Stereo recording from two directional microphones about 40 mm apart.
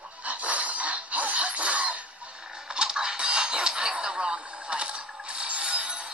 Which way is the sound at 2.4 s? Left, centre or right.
Centre.